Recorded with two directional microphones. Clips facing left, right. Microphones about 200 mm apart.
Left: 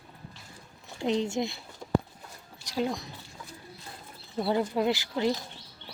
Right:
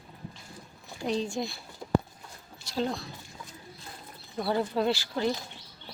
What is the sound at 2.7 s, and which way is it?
Speech, 15° left (ahead or behind).